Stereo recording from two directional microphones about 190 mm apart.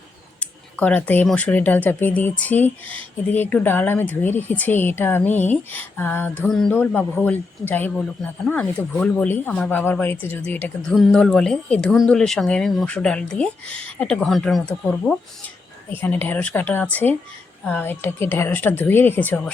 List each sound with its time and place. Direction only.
0.3 s speech: 5° left (ahead or behind)